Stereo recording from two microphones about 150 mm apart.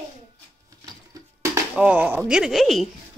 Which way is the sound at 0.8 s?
25° right (ahead or behind).